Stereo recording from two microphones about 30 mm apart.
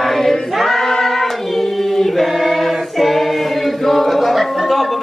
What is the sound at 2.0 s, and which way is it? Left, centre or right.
Choir, centre.